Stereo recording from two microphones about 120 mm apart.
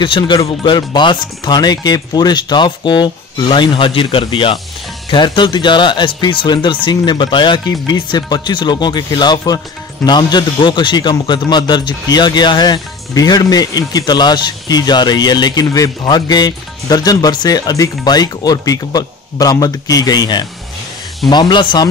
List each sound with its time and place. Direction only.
0.0 s a man's voice: 45° left (ahead or behind)